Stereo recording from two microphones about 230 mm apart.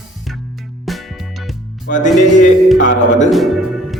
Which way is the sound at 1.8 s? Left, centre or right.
Left.